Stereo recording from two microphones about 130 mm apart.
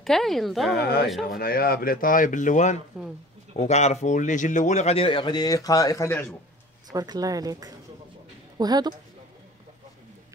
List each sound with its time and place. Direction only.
0.0 s a woman's voice: centre (ahead or behind)
1.9 s speech: 90° left; by 2.8 s 70° left (ahead or behind)
3.5 s a man's voice: 60° left (ahead or behind); by 6.1 s 25° left (ahead or behind)
6.9 s a woman's voice: 30° right (ahead or behind)